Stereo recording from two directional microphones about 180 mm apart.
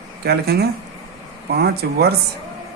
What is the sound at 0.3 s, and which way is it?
Speech, 65° right (ahead or behind).